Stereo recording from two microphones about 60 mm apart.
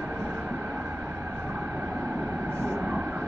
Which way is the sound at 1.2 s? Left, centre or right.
Right.